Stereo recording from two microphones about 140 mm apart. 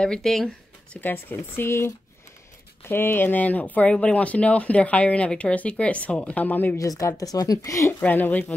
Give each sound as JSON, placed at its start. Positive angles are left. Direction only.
{"t": 0.0, "sound": "speech", "side_deg": 5}
{"t": 1.0, "sound": "speech", "side_deg": 15}
{"t": 6.8, "sound": "speech", "side_deg": 25}
{"t": 8.0, "sound": "speech", "side_deg": 10}